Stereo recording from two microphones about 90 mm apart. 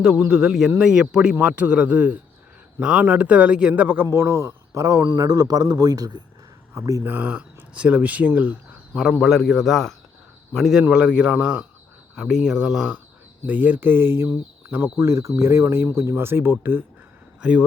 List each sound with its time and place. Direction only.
0.0 s a man's voice: 10° right (ahead or behind); by 7.0 s 40° right (ahead or behind)
7.0 s speech: 20° right (ahead or behind)
9.0 s a man's voice: 5° right (ahead or behind)
10.8 s speech: 15° right (ahead or behind)
13.5 s a man's voice: 20° right (ahead or behind)
14.3 s speech: 15° right (ahead or behind)
14.9 s a man's voice: 30° right (ahead or behind)
17.4 s speech: 10° right (ahead or behind)